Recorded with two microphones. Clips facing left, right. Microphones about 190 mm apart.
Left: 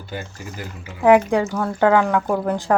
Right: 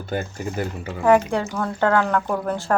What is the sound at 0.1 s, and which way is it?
Speech, 50° right (ahead or behind).